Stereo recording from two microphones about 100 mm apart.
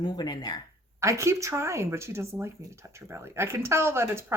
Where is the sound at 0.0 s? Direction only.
45° left (ahead or behind).